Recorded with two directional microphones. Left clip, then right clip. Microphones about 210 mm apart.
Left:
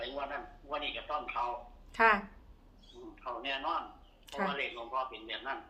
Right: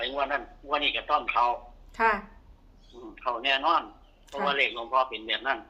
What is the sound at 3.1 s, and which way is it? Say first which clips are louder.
A man's voice: right 11 dB; 50° right (ahead or behind).